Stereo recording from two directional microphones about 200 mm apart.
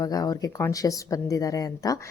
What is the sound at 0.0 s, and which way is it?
A woman's voice, 20° left (ahead or behind).